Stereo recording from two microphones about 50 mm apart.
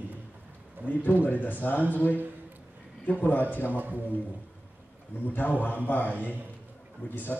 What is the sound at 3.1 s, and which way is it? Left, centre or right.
Speech, left.